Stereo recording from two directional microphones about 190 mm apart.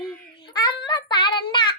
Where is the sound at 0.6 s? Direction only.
20° left (ahead or behind).